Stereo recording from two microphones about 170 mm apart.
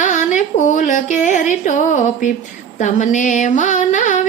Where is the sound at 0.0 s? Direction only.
45° left (ahead or behind).